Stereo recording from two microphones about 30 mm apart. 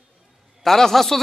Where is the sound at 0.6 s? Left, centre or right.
Centre.